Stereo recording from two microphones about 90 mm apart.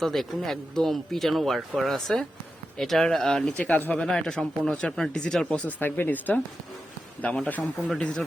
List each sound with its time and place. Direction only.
0.0 s speech: centre (ahead or behind)
3.6 s speech: 20° left (ahead or behind)
5.6 s speech: 20° left (ahead or behind)